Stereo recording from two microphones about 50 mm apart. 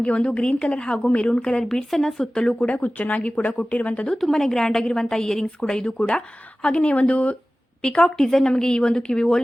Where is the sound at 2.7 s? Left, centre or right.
Left.